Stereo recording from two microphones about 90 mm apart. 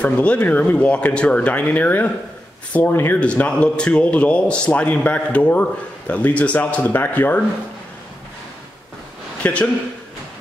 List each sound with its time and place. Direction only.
0.0 s a man's voice: 15° left (ahead or behind)
3.2 s a man's voice: 10° left (ahead or behind)
9.4 s a man's voice: 15° left (ahead or behind)